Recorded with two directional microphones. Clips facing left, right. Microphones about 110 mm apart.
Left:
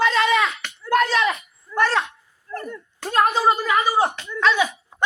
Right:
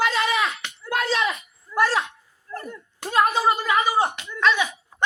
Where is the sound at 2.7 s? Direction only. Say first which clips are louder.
Left 2 dB; 15° right (ahead or behind).